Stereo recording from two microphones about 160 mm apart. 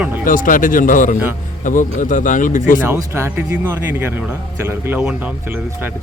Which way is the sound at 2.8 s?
15° right (ahead or behind).